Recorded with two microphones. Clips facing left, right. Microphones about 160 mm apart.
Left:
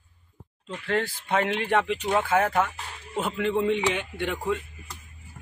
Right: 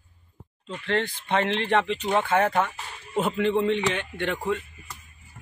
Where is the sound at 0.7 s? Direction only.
5° left (ahead or behind).